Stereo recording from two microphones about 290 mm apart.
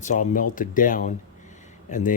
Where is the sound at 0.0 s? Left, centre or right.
Left.